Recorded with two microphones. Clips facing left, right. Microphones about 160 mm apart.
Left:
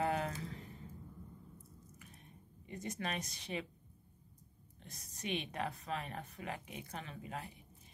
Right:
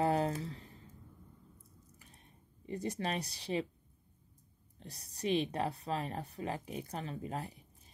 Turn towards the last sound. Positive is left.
turn(degrees=-35)  # may be behind; listen again after turning